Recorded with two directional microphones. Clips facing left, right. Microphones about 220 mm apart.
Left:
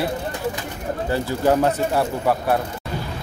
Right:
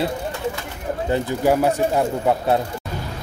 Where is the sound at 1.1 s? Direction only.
20° right (ahead or behind).